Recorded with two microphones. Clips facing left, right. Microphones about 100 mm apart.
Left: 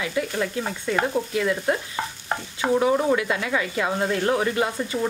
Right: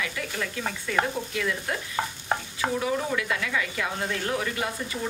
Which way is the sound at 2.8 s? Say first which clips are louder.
Left 7 dB; 30° left (ahead or behind).